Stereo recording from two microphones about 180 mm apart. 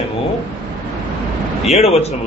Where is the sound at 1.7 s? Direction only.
35° left (ahead or behind).